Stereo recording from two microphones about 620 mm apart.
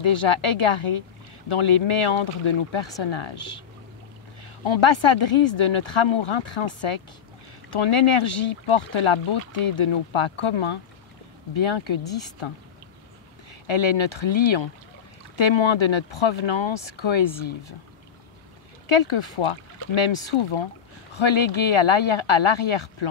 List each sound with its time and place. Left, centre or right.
0.0 s speech: left
4.6 s speech: left
13.5 s speech: left
18.9 s speech: left